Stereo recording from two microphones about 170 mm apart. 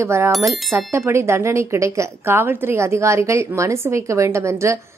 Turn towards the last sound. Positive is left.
turn(degrees=-15)  # may be behind; listen again after turning